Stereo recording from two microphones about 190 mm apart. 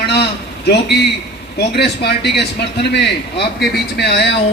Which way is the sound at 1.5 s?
60° left (ahead or behind).